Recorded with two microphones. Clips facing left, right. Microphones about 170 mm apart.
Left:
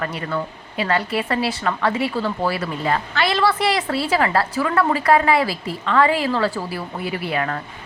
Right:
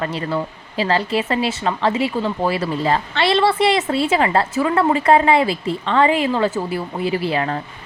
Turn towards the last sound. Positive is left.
turn(degrees=-25)  # may be behind; listen again after turning